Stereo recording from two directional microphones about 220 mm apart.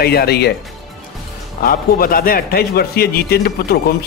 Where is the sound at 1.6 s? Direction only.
40° left (ahead or behind).